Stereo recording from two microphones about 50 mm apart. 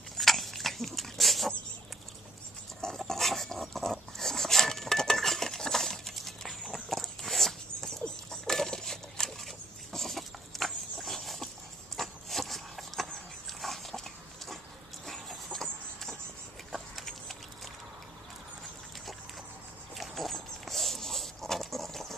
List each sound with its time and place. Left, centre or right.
0.2 s dog: centre
3.0 s dog: centre
6.6 s a sound: centre
12.0 s dog: centre
15.0 s chicken: centre
16.7 s a sound: centre
20.0 s dog: centre